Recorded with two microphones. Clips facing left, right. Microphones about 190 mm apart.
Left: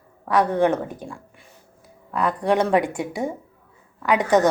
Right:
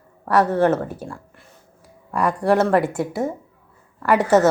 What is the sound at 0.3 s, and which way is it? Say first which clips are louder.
A woman's voice: right 2 dB; 5° right (ahead or behind).